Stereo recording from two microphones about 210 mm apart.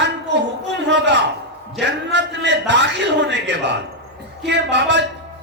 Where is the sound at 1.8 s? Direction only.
55° right (ahead or behind).